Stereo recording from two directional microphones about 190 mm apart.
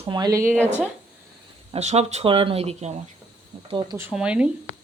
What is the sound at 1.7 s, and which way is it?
Speech, 35° right (ahead or behind).